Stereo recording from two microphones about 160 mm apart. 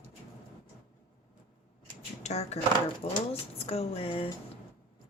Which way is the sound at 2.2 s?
45° left (ahead or behind).